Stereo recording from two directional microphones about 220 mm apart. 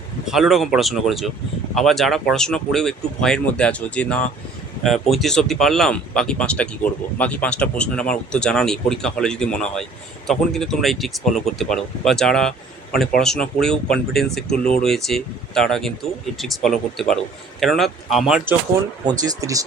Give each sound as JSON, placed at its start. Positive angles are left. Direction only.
{"t": 0.3, "sound": "speech", "side_deg": 0}
{"t": 19.0, "sound": "speech", "side_deg": -15}